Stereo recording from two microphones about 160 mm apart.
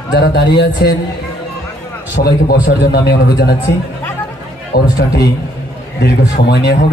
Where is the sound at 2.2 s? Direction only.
85° left.